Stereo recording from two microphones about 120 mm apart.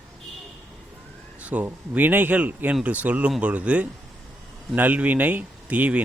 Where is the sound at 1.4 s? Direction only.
15° right (ahead or behind).